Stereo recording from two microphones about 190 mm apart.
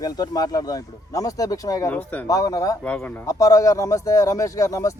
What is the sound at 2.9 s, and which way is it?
Speech, 5° left (ahead or behind).